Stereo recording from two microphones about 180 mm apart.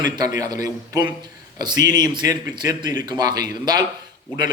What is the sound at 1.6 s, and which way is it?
A man's voice, 20° right (ahead or behind).